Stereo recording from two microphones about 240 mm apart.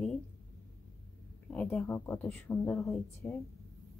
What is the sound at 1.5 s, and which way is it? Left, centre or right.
Speech, centre.